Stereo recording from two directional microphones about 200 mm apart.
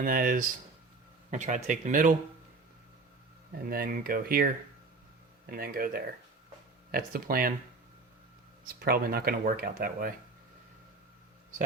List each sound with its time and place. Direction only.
0.0 s speech: 45° right (ahead or behind)
3.7 s speech: 45° right (ahead or behind)
5.5 s speech: 45° right (ahead or behind)
8.6 s speech: 50° right (ahead or behind)